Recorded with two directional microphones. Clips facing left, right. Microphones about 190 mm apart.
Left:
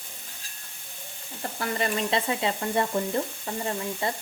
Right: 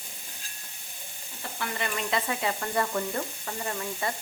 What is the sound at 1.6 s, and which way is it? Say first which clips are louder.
Frying: left 5 dB; 35° left (ahead or behind).